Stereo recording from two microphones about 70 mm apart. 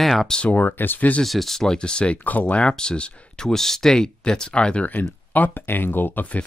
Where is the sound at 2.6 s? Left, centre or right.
Centre.